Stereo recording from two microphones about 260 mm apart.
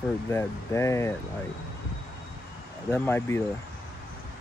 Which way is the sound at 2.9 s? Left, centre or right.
Centre.